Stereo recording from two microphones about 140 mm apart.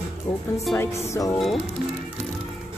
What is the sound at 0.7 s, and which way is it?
Music, 20° left (ahead or behind).